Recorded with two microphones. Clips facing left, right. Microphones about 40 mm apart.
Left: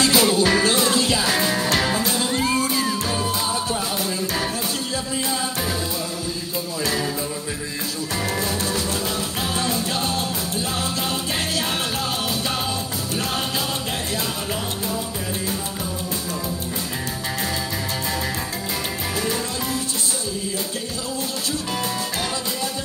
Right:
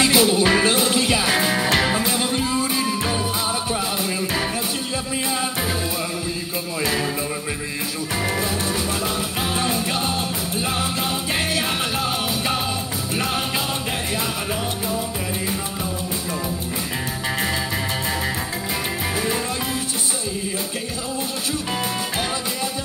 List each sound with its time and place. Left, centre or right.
0.0 s music: right
6.8 s music: centre
8.2 s music: right